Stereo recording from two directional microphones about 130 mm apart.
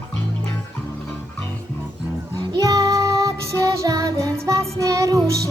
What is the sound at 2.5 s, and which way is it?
Music, 30° right (ahead or behind).